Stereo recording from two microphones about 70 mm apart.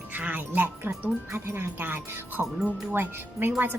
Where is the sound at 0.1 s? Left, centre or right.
Right.